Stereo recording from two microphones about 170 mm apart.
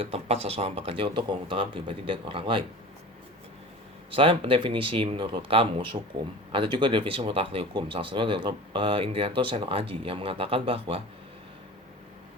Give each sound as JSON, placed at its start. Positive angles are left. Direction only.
{"t": 0.0, "sound": "speech", "side_deg": -35}
{"t": 4.1, "sound": "speech", "side_deg": -30}